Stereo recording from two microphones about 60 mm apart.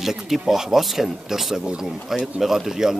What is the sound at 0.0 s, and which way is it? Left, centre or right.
Speech, centre.